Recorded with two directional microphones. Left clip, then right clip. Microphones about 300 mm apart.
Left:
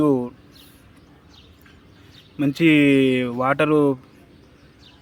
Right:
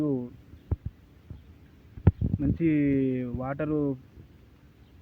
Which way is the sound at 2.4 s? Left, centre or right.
Centre.